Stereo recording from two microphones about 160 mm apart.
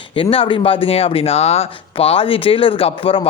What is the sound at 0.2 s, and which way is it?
Speech, 35° left (ahead or behind).